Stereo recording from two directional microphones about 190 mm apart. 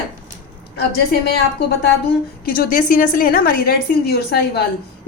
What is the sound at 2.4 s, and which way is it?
A woman's voice, 50° left (ahead or behind).